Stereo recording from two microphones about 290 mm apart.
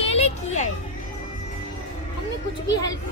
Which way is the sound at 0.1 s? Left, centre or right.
Left.